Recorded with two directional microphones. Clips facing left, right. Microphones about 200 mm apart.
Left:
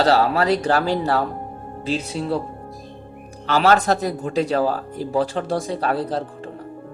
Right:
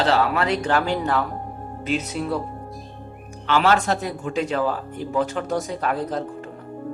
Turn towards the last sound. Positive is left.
turn(degrees=35)  # may be behind; listen again after turning